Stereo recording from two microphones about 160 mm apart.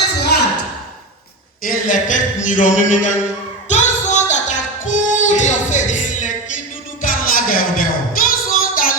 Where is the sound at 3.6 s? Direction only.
50° left (ahead or behind); by 8.9 s 65° left (ahead or behind).